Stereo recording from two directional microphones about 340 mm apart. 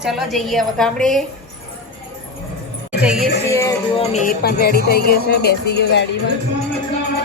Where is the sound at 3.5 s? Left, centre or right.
Centre; by 6.0 s left.